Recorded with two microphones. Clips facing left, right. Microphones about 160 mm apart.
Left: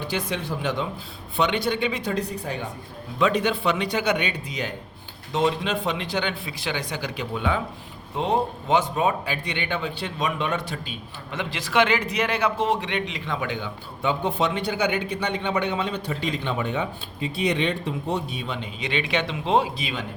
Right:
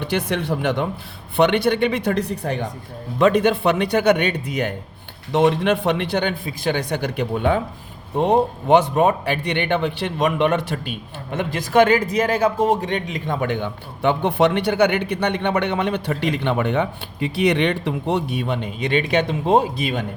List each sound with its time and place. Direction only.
0.0 s a man's voice: 65° right (ahead or behind); by 20.1 s 50° right (ahead or behind)